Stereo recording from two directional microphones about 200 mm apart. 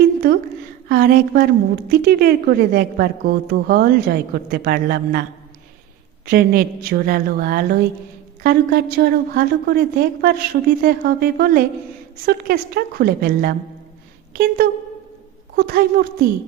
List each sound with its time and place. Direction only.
0.2 s a woman's voice: 50° right (ahead or behind)
6.2 s a woman's voice: 50° right (ahead or behind)
14.6 s a woman's voice: 50° right (ahead or behind)